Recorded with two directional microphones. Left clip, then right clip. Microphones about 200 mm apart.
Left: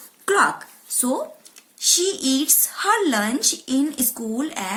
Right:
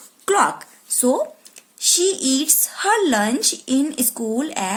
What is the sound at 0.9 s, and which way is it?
Speech, 45° right (ahead or behind).